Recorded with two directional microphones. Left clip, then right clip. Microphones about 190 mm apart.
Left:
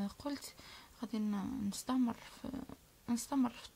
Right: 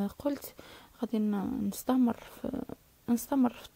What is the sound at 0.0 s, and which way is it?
Speech, 35° right (ahead or behind).